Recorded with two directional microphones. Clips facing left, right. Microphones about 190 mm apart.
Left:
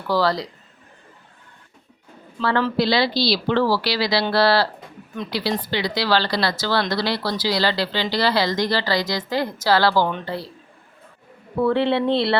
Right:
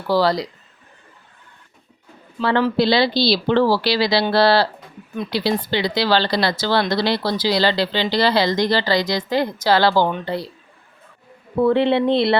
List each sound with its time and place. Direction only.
0.1 s speech: 15° right (ahead or behind)
2.4 s speech: 15° right (ahead or behind)
11.5 s speech: 20° right (ahead or behind)